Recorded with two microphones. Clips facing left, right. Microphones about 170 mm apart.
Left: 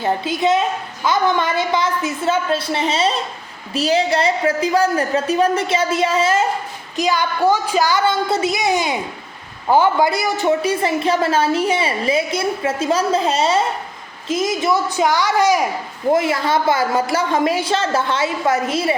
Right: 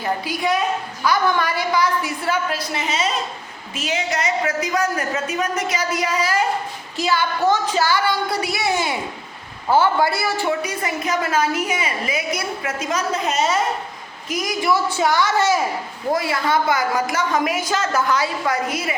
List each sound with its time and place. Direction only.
0.0 s a woman's voice: 25° left (ahead or behind)